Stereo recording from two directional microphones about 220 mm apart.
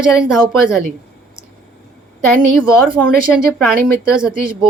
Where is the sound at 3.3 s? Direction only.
Centre (ahead or behind).